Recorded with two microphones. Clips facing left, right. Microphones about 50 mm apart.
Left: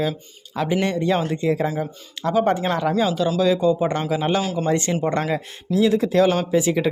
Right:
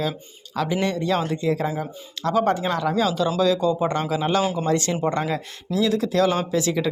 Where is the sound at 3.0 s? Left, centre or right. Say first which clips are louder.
Right 1 dB; centre.